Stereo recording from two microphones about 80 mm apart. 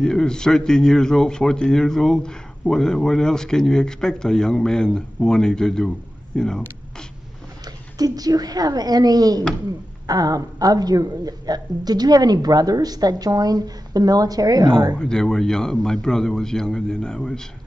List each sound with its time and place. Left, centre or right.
0.0 s a man's voice: centre
7.6 s a woman's voice: right
15.0 s a man's voice: centre